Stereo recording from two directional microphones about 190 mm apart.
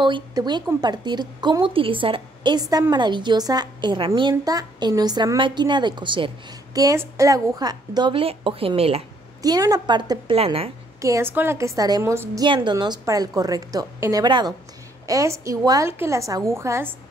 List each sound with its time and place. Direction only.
0.0 s a woman's voice: 20° right (ahead or behind)
9.4 s a woman's voice: 20° right (ahead or behind)
11.0 s a woman's voice: 15° right (ahead or behind)